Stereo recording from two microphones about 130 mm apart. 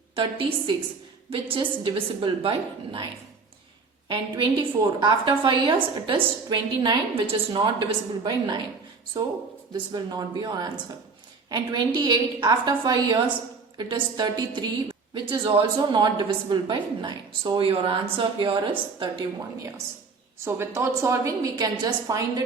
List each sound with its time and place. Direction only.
0.2 s a woman's voice: 40° right (ahead or behind)
4.1 s a woman's voice: 40° right (ahead or behind)
20.4 s a woman's voice: 20° right (ahead or behind)